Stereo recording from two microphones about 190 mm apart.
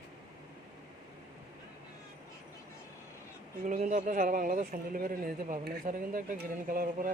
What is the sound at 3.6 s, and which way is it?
Speech, 40° right (ahead or behind).